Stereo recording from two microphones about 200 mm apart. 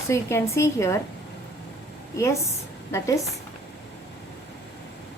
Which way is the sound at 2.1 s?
15° left (ahead or behind).